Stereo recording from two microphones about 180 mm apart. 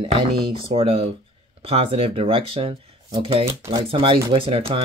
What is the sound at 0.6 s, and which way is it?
Speech, 30° right (ahead or behind).